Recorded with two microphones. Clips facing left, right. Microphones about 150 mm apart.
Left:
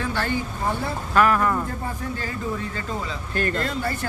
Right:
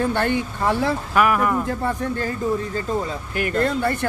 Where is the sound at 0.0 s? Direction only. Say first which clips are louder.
Right 5 dB; 55° right (ahead or behind); by 0.9 s 90° right.